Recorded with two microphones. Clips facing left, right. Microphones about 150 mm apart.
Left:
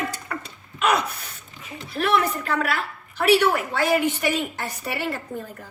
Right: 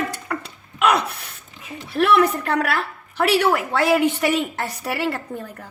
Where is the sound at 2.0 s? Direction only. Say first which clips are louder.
Right 5 dB; 60° right (ahead or behind).